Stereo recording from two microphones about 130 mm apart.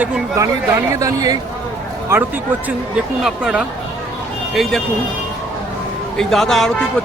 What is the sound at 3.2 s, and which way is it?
A man's voice, 5° right (ahead or behind).